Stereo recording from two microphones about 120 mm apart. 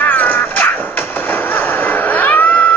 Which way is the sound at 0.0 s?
15° left (ahead or behind).